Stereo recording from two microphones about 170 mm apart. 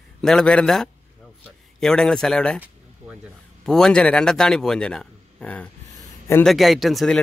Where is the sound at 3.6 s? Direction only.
5° left (ahead or behind).